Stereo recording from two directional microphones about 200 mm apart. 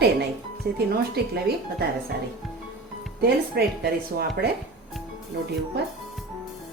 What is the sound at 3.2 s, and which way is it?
Speech, 50° right (ahead or behind).